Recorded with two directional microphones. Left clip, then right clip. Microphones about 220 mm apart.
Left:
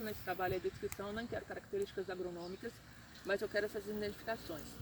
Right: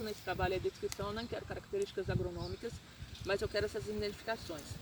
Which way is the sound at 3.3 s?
10° left (ahead or behind).